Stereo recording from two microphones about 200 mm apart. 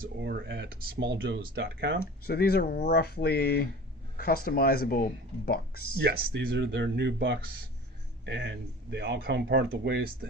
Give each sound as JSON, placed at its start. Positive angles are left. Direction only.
{"t": 0.0, "sound": "speech", "side_deg": -55}
{"t": 2.2, "sound": "speech", "side_deg": 50}
{"t": 6.0, "sound": "speech", "side_deg": -55}